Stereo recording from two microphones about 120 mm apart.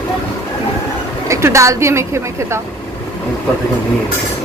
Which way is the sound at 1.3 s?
25° right (ahead or behind).